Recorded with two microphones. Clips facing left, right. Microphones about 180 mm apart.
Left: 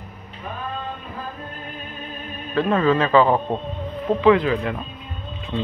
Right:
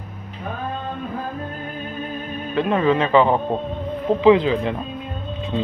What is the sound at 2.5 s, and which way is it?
A man's voice, 20° right (ahead or behind).